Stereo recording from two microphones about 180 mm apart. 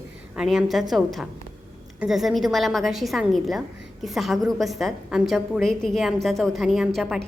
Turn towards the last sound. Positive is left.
turn(degrees=0)  # may be behind; listen again after turning